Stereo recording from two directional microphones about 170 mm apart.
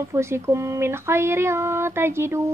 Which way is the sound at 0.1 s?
15° right (ahead or behind).